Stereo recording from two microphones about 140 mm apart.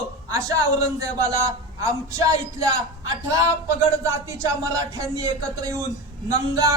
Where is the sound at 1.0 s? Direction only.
25° right (ahead or behind).